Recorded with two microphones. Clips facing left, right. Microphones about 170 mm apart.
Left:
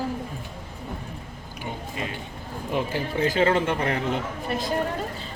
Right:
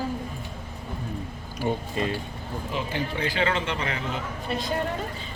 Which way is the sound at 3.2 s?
45° left (ahead or behind).